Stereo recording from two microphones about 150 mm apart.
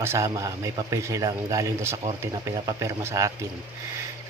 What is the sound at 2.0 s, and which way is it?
A man's voice, 30° right (ahead or behind).